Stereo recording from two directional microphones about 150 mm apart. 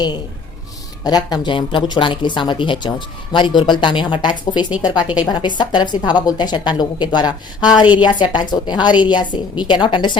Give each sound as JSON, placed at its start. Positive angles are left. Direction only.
{"t": 1.0, "sound": "a woman's voice", "side_deg": 25}